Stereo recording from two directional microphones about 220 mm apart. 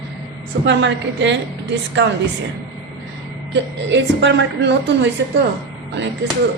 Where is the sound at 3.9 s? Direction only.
55° right (ahead or behind).